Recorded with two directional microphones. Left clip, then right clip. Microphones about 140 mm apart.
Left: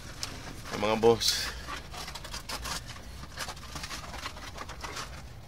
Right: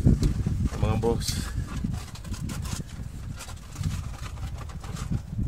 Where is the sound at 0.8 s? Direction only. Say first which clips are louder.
Left 4 dB; 15° right (ahead or behind).